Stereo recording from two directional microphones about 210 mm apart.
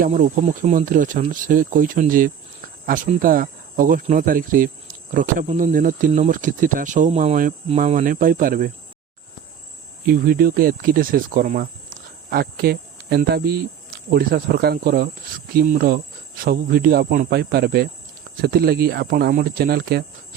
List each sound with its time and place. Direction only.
0.0 s speech: 40° right (ahead or behind)
10.1 s speech: 45° right (ahead or behind)